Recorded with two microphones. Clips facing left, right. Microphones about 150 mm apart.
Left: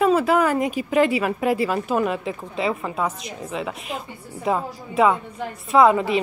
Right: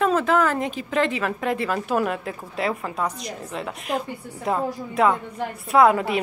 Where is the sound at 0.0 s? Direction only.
10° left (ahead or behind).